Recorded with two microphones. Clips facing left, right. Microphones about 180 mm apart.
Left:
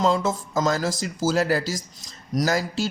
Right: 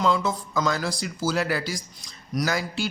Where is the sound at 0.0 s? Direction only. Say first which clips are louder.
Left 2 dB; 40° left (ahead or behind).